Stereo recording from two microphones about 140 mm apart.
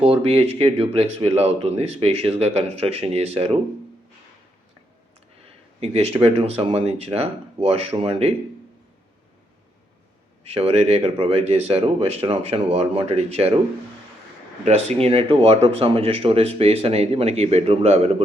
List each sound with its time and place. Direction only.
0.0 s speech: 45° right (ahead or behind)
5.8 s speech: 50° right (ahead or behind)
10.4 s speech: 50° right (ahead or behind)
14.6 s speech: 55° right (ahead or behind)